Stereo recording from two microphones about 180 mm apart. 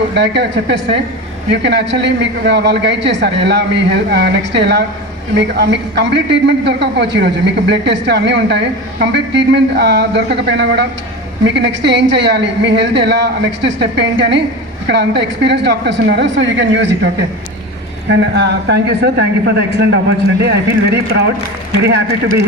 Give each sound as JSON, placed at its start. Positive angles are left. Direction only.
{"t": 0.1, "sound": "a man's voice", "side_deg": -70}
{"t": 18.1, "sound": "a man's voice", "side_deg": -70}